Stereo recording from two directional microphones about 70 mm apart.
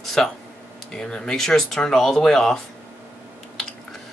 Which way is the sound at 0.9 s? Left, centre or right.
Centre.